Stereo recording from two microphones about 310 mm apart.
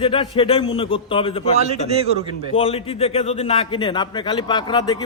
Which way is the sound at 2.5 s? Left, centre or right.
Centre.